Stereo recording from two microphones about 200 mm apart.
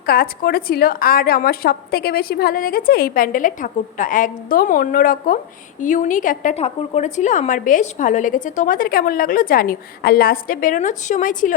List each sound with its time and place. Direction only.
0.0 s a woman's voice: 50° left (ahead or behind)